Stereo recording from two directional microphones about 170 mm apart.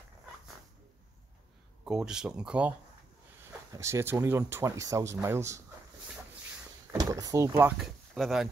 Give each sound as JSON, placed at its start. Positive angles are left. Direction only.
{"t": 1.9, "sound": "speech", "side_deg": -5}
{"t": 3.7, "sound": "speech", "side_deg": -15}
{"t": 6.9, "sound": "speech", "side_deg": -20}
{"t": 7.8, "sound": "speech", "side_deg": 0}